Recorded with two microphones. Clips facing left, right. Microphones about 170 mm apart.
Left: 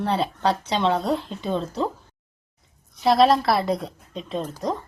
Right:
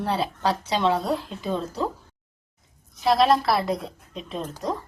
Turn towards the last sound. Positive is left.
turn(degrees=0)  # may be behind; listen again after turning